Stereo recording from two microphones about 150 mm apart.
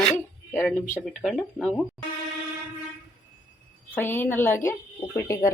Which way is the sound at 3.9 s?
15° left (ahead or behind).